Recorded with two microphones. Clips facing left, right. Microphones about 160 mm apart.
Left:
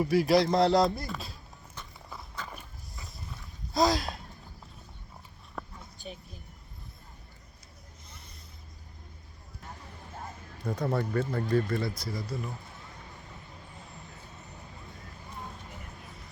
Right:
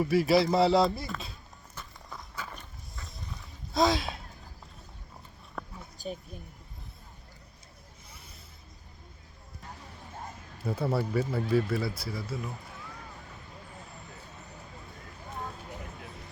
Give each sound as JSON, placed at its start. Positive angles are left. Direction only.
{"t": 0.0, "sound": "a man's voice", "side_deg": 0}
{"t": 2.5, "sound": "dog", "side_deg": 5}
{"t": 3.7, "sound": "a sound", "side_deg": 0}
{"t": 5.6, "sound": "a sound", "side_deg": 5}
{"t": 6.0, "sound": "speech", "side_deg": -40}
{"t": 10.6, "sound": "speech", "side_deg": -5}